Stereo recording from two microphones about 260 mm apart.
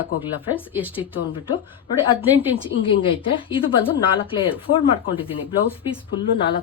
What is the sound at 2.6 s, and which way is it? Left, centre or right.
Speech, centre.